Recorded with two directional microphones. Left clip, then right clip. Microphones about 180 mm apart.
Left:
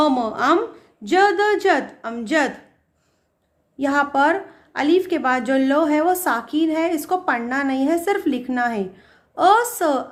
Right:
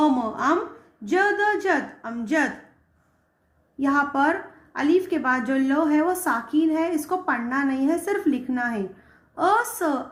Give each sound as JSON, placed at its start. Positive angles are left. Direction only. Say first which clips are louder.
{"t": 0.0, "sound": "a woman's voice", "louder": "left 3 dB", "side_deg": 40}
{"t": 3.8, "sound": "a woman's voice", "louder": "left 3 dB", "side_deg": 35}